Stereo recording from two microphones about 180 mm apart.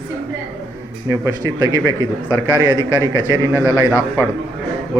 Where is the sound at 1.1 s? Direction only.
20° right (ahead or behind).